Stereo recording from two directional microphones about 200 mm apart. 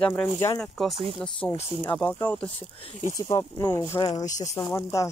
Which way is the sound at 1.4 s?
25° left (ahead or behind).